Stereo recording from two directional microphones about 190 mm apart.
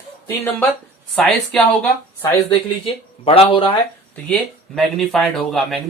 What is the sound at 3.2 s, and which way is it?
Speech, 30° left (ahead or behind).